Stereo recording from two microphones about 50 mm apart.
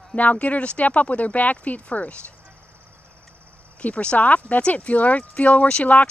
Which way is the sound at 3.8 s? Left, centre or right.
Left.